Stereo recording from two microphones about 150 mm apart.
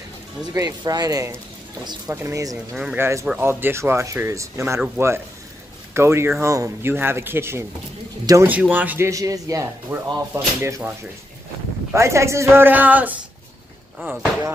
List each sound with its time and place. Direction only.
0.5 s speech: 25° right (ahead or behind)
2.7 s speech: 5° right (ahead or behind)
3.0 s a man's voice: 20° right (ahead or behind)
11.9 s a man's voice: 20° right (ahead or behind)